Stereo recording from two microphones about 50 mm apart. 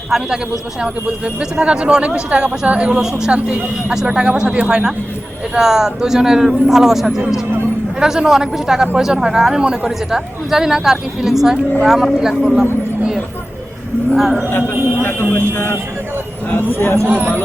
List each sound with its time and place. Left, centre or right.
0.1 s speech: centre
0.8 s speech: centre
14.1 s speech: centre
15.3 s speech: left
17.1 s speech: right